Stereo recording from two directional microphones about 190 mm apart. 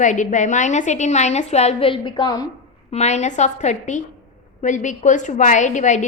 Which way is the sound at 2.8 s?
35° left (ahead or behind).